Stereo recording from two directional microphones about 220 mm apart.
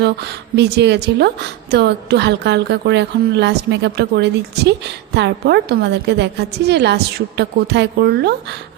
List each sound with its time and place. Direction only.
0.0 s a woman's voice: 50° right (ahead or behind)